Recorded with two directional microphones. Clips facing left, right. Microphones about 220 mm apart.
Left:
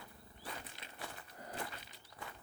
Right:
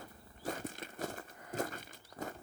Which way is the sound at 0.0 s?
45° right (ahead or behind).